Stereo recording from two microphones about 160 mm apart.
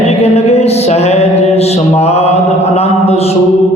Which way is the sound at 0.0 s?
40° left (ahead or behind).